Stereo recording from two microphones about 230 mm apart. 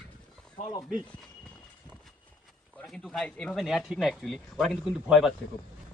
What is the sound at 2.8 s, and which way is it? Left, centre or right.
Speech, centre.